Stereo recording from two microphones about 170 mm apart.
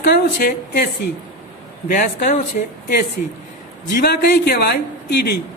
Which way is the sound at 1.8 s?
55° left (ahead or behind).